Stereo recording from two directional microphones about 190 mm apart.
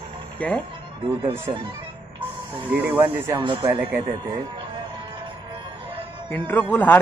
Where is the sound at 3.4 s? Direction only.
25° right (ahead or behind).